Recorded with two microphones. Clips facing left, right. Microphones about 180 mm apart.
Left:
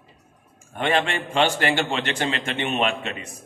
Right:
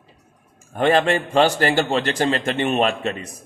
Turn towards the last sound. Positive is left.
turn(degrees=-40)  # may be behind; listen again after turning